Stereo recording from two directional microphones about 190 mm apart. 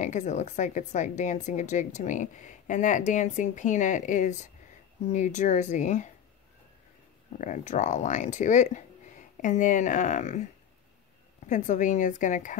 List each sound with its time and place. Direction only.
0.0 s a woman's voice: 40° left (ahead or behind)
7.3 s a woman's voice: 40° left (ahead or behind)